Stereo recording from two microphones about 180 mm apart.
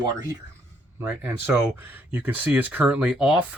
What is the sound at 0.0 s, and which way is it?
Speech, 20° right (ahead or behind).